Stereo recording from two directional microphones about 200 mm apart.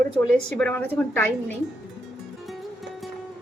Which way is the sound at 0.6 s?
5° left (ahead or behind).